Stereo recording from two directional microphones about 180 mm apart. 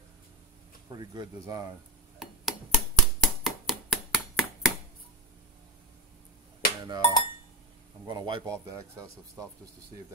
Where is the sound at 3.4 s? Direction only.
Centre (ahead or behind).